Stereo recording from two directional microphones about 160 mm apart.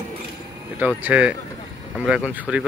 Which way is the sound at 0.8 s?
10° right (ahead or behind).